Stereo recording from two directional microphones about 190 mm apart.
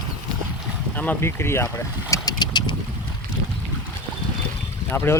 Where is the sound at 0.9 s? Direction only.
10° left (ahead or behind).